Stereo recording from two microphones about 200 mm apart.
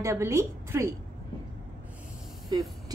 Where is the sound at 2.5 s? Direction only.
20° right (ahead or behind).